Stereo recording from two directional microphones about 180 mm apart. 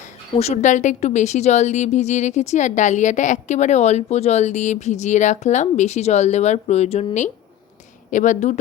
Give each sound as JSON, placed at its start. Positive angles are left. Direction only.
{"t": 0.3, "sound": "a woman's voice", "side_deg": 40}